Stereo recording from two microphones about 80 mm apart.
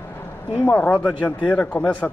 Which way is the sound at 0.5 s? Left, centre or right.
Centre.